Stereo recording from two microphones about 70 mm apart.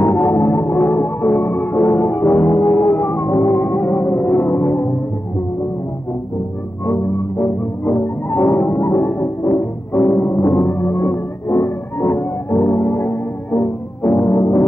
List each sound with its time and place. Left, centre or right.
0.0 s organ: left
1.3 s music: left
3.7 s music: left
6.9 s music: left